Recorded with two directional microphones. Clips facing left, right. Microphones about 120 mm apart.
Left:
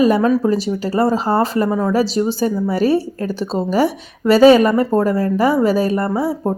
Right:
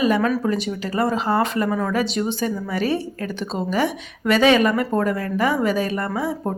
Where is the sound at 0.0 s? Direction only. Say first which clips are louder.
Left 5 dB; 40° left (ahead or behind).